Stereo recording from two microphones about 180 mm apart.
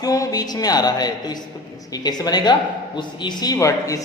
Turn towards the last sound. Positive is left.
turn(degrees=20)  # may be behind; listen again after turning